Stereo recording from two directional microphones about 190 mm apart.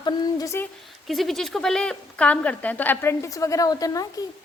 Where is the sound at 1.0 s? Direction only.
Centre (ahead or behind).